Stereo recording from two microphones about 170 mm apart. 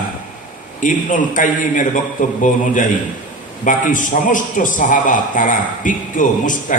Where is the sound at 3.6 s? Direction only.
50° left (ahead or behind).